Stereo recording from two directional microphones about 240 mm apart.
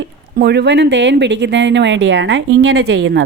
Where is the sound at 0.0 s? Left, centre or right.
Right.